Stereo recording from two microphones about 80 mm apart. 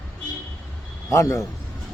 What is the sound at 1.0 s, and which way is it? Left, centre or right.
Speech, left.